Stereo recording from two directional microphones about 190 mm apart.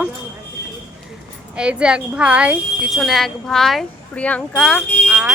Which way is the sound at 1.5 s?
5° right (ahead or behind).